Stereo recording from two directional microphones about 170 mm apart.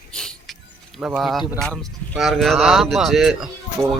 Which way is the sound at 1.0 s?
Centre (ahead or behind).